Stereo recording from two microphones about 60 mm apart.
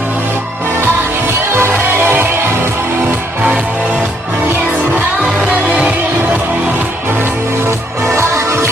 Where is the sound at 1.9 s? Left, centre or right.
Right.